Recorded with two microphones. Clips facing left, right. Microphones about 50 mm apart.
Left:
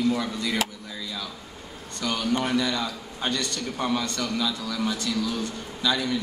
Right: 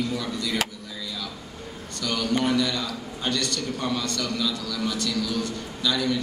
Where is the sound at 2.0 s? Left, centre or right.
Left.